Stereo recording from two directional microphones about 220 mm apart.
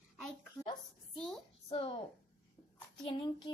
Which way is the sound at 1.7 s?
25° left (ahead or behind).